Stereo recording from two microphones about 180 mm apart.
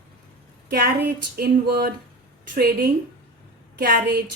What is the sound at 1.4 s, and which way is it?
Speech, 55° right (ahead or behind).